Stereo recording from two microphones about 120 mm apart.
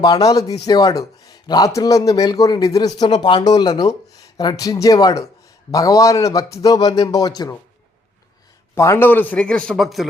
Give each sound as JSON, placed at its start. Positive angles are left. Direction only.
{"t": 0.0, "sound": "a man's voice", "side_deg": 30}
{"t": 8.7, "sound": "a man's voice", "side_deg": 25}